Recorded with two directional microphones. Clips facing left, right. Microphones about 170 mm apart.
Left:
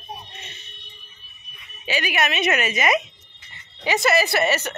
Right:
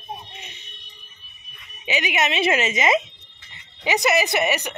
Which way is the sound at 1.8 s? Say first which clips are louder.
Even; 20° right (ahead or behind).